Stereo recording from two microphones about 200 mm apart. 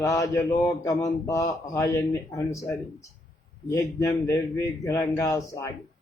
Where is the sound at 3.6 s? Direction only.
15° left (ahead or behind).